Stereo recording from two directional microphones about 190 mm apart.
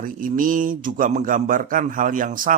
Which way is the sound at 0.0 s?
45° right (ahead or behind).